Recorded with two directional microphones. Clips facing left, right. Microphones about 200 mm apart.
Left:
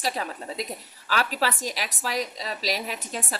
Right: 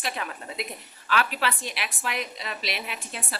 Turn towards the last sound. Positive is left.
turn(degrees=40)  # may be behind; listen again after turning